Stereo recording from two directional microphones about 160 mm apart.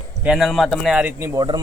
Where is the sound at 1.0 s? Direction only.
20° right (ahead or behind).